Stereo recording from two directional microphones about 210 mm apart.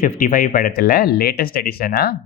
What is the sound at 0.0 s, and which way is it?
Speech, 40° left (ahead or behind).